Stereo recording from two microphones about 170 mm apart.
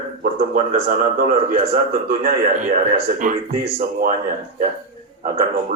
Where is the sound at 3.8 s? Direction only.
55° right (ahead or behind).